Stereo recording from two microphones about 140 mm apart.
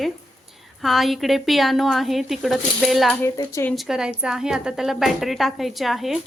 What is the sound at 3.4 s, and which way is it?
Speech, 20° left (ahead or behind).